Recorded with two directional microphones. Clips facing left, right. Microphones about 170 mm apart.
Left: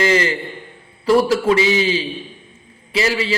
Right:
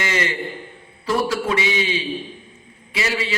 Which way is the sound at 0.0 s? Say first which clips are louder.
Left 7 dB; 30° left (ahead or behind).